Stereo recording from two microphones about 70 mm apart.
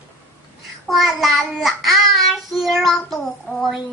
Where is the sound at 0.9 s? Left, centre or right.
Centre.